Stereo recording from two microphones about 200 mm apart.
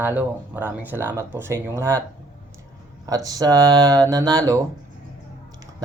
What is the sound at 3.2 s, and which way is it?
Speech, 20° right (ahead or behind).